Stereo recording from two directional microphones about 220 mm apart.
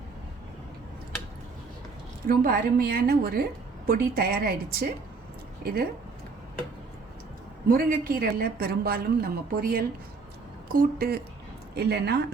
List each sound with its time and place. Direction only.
2.2 s a woman's voice: 40° right (ahead or behind)
7.7 s a woman's voice: 40° right (ahead or behind)